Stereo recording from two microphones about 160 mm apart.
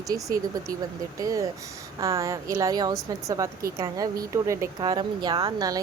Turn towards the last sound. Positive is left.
turn(degrees=-25)  # may be behind; listen again after turning